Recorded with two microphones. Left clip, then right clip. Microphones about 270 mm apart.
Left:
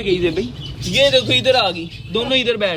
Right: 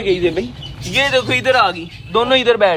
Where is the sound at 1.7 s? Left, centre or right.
Centre.